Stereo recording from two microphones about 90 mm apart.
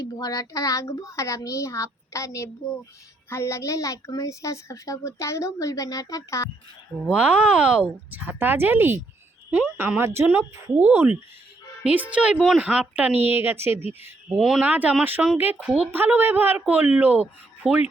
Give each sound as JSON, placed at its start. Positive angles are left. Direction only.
{"t": 0.0, "sound": "a woman's voice", "side_deg": 45}
{"t": 7.1, "sound": "speech", "side_deg": -15}
{"t": 10.2, "sound": "speech", "side_deg": -15}
{"t": 14.3, "sound": "speech", "side_deg": -5}
{"t": 14.7, "sound": "speech", "side_deg": -20}